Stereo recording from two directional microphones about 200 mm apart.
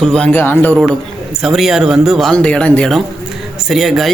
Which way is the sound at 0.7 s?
Centre (ahead or behind).